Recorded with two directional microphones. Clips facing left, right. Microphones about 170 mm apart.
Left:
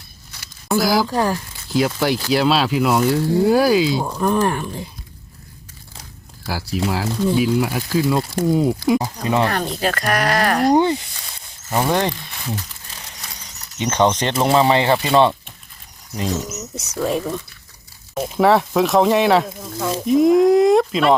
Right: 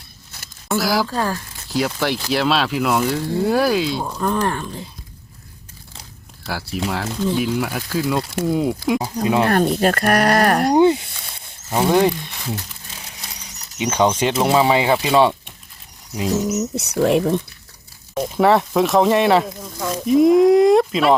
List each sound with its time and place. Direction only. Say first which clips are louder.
0.7 s speech: left 2 dB; centre (ahead or behind)
1.0 s speech: left 3 dB; 15° left (ahead or behind)
1.7 s speech: left 2 dB; centre (ahead or behind)
6.4 s speech: left 2 dB; centre (ahead or behind)
7.3 s speech: left 3 dB; 5° left (ahead or behind)
8.4 s speech: left 3 dB; centre (ahead or behind)
9.5 s speech: right 5 dB; 50° right (ahead or behind)
10.8 s speech: right 3 dB; 10° right (ahead or behind)
13.7 s speech: even; 10° right (ahead or behind)
16.7 s speech: right 3 dB; 65° right (ahead or behind)
18.1 s speech: even; centre (ahead or behind)